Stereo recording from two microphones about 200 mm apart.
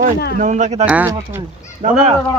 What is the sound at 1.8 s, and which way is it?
Speech, 40° right (ahead or behind).